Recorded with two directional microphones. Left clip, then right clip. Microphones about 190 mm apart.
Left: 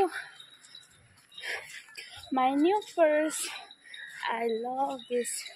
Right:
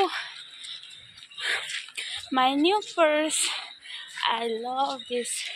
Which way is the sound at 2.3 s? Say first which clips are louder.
Right 3 dB; 10° right (ahead or behind).